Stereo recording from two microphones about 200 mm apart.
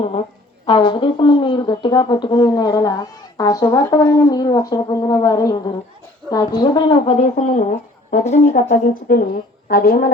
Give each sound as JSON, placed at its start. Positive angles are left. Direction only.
{"t": 0.6, "sound": "a woman's voice", "side_deg": 25}